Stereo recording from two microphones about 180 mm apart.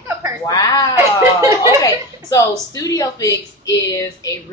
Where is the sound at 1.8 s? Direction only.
20° left (ahead or behind).